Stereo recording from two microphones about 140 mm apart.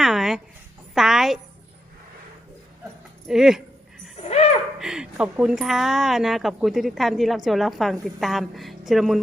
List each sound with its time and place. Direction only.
0.0 s a sound: 5° right (ahead or behind)
3.2 s speech: 5° right (ahead or behind)
4.2 s music: 45° left (ahead or behind)
4.8 s speech: 5° right (ahead or behind)